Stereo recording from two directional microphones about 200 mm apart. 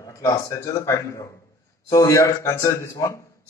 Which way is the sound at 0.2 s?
15° left (ahead or behind).